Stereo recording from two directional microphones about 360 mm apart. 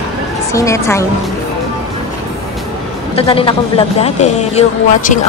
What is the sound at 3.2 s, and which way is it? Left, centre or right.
Speech, centre.